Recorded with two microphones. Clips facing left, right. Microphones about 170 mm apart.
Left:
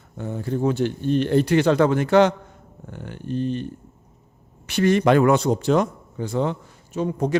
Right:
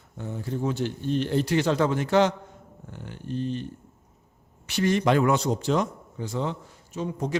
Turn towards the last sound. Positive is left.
turn(degrees=60)  # may be behind; listen again after turning